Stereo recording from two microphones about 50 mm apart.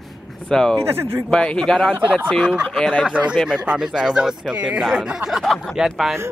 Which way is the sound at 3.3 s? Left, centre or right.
Centre.